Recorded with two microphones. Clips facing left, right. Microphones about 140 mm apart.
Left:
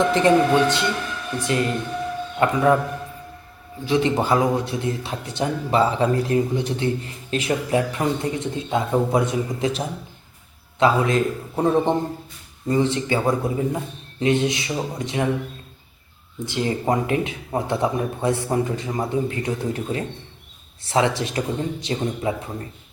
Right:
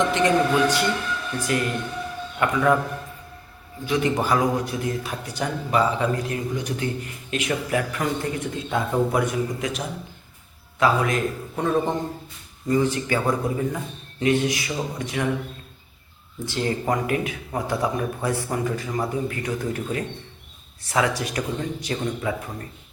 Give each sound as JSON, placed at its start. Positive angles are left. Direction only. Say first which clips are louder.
{"t": 0.0, "sound": "a man's voice", "louder": "left 3 dB", "side_deg": 35}
{"t": 3.8, "sound": "speech", "louder": "left 3 dB", "side_deg": 25}
{"t": 16.5, "sound": "speech", "louder": "left 2 dB", "side_deg": 20}